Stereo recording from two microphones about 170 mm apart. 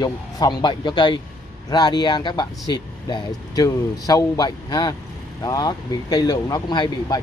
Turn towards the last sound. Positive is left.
turn(degrees=25)  # may be behind; listen again after turning